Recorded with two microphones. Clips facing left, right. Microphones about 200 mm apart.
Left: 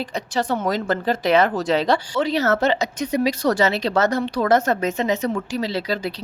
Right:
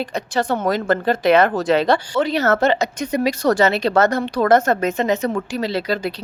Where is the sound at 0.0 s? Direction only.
55° right (ahead or behind).